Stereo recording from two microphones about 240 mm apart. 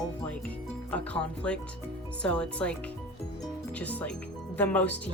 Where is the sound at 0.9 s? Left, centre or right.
Centre.